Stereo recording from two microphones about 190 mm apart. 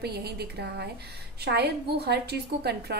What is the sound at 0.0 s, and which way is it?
A woman's voice, 60° right (ahead or behind).